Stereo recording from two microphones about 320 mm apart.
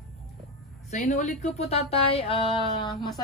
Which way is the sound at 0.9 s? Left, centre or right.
Left.